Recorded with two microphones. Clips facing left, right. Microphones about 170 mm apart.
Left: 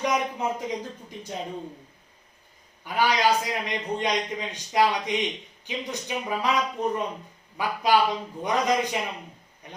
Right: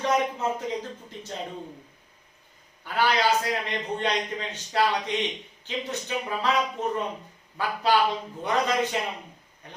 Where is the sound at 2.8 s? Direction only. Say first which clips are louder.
Left 1 dB; 15° left (ahead or behind).